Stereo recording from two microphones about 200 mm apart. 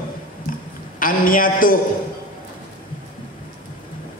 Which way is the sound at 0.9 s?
45° left (ahead or behind).